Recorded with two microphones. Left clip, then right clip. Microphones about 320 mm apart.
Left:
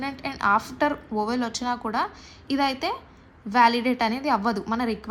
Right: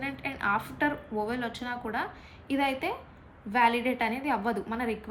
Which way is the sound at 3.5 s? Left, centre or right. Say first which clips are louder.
Left 5 dB; centre.